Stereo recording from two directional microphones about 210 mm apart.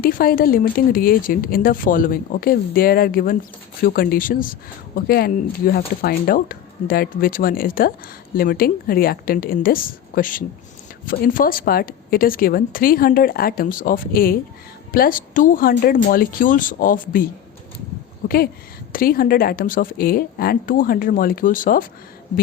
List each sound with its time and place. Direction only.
0.0 s a woman's voice: 45° left (ahead or behind)